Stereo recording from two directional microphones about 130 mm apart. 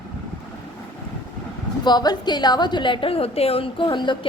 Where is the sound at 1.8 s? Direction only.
30° left (ahead or behind).